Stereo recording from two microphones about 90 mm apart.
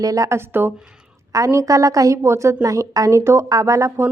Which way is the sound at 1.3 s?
35° right (ahead or behind).